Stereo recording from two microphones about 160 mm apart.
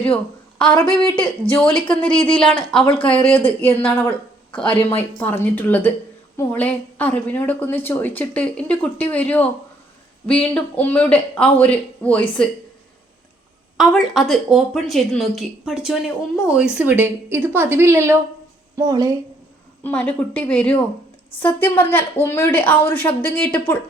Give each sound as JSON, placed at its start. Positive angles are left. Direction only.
{"t": 0.8, "sound": "speech", "side_deg": 15}
{"t": 1.7, "sound": "speech", "side_deg": 30}
{"t": 3.3, "sound": "speech", "side_deg": 10}
{"t": 4.7, "sound": "speech", "side_deg": 35}
{"t": 4.9, "sound": "speech", "side_deg": 15}
{"t": 13.7, "sound": "a woman's voice", "side_deg": 0}
{"t": 19.8, "sound": "speech", "side_deg": 10}